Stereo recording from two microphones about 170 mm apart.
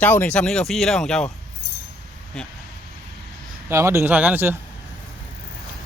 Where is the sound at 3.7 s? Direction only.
15° right (ahead or behind).